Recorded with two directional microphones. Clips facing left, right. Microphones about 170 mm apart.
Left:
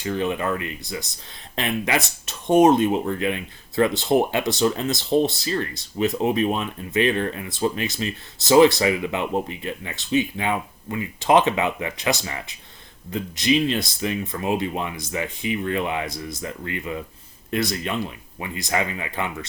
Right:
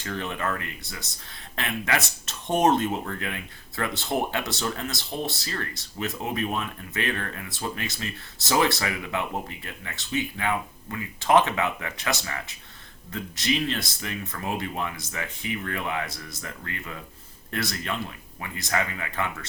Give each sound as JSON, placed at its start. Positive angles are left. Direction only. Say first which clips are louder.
{"t": 0.0, "sound": "speech", "louder": "left 6 dB", "side_deg": 15}